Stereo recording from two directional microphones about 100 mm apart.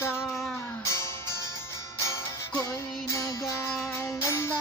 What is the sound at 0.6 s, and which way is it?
Music, 30° left (ahead or behind).